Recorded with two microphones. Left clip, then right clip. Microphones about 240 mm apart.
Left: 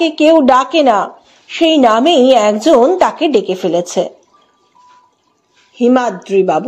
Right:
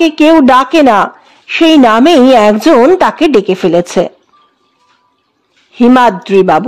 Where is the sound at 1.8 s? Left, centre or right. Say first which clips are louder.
Right 2 dB; right.